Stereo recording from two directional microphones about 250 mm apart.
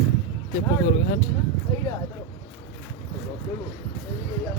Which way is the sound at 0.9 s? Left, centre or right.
Left.